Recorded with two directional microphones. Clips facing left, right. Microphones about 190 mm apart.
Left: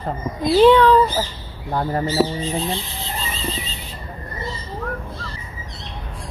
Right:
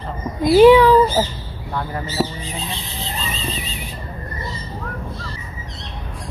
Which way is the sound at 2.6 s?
15° right (ahead or behind).